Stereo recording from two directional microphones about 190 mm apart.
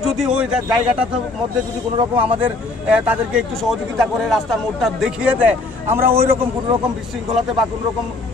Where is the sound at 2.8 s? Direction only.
5° right (ahead or behind).